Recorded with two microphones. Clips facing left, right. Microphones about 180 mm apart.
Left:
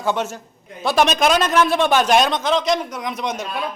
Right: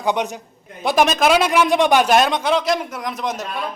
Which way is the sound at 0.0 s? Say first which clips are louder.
Right 1 dB; 15° right (ahead or behind).